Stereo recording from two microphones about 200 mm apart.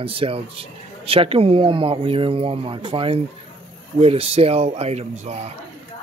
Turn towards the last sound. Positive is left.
turn(degrees=-30)  # may be behind; listen again after turning